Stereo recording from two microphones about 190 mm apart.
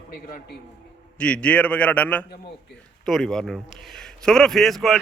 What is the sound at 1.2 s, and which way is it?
A man's voice, 5° left (ahead or behind).